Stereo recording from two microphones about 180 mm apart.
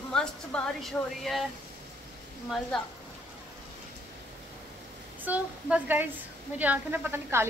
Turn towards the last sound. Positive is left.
turn(degrees=-10)  # may be behind; listen again after turning